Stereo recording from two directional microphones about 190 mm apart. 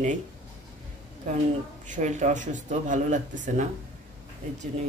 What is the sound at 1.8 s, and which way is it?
Speech, 40° right (ahead or behind).